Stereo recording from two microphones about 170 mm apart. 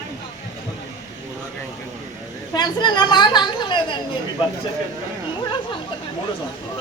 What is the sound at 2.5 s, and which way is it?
A woman's voice, 25° left (ahead or behind).